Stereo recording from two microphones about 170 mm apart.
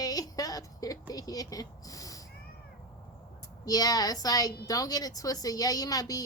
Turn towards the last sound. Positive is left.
turn(degrees=20)  # may be behind; listen again after turning